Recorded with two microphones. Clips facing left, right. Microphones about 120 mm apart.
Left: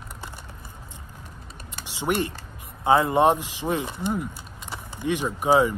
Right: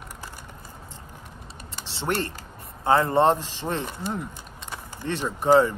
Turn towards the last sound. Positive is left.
turn(degrees=10)  # may be behind; listen again after turning